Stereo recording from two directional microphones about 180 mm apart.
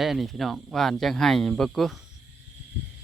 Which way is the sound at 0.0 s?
Centre (ahead or behind).